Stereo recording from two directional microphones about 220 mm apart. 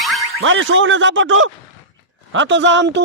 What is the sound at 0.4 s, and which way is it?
A man's voice, 60° right (ahead or behind).